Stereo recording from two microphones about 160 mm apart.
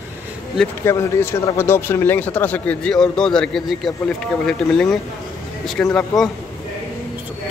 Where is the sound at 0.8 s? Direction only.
15° left (ahead or behind).